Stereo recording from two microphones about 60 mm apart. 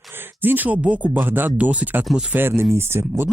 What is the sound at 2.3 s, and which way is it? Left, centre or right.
Speech, right.